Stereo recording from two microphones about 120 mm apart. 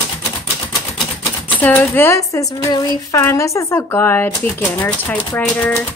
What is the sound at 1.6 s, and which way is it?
Speech, 15° left (ahead or behind).